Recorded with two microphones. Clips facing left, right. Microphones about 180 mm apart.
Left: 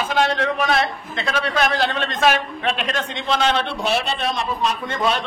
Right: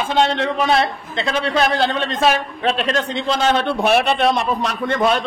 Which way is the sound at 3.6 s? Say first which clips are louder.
Right 6 dB; 55° right (ahead or behind).